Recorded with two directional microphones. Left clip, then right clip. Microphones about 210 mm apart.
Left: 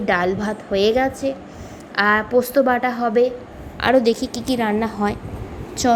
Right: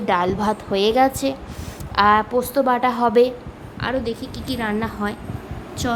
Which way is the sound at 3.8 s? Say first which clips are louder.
Left 8 dB; 25° left (ahead or behind).